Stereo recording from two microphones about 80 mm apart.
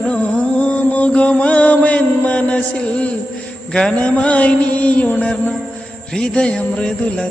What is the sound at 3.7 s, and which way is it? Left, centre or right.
Music, centre.